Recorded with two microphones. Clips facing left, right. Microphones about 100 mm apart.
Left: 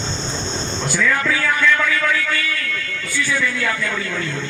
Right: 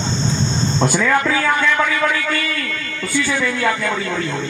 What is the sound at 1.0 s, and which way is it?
Speech, 35° right (ahead or behind).